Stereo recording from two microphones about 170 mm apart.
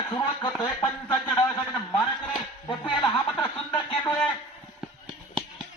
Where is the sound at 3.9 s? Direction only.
5° left (ahead or behind).